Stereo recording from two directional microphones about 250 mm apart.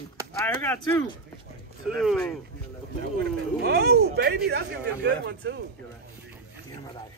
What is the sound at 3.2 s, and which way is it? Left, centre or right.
A man's voice, right.